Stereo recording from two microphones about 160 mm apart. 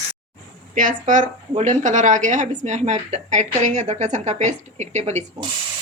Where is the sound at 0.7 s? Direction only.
55° right (ahead or behind).